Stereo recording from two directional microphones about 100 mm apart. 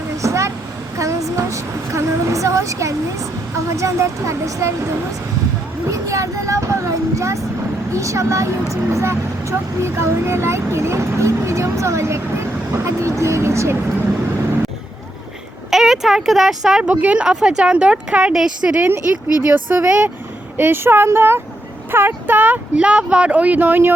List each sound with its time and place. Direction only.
0.2 s vehicle: 30° right (ahead or behind)
0.9 s a sound: 30° right (ahead or behind)
3.7 s speech: 30° right (ahead or behind)
5.9 s speech: 35° right (ahead or behind)
15.7 s speech: 5° right (ahead or behind); by 23.9 s 20° right (ahead or behind)